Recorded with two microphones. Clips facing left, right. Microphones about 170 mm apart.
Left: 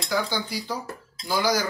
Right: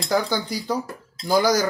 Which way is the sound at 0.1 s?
45° right (ahead or behind).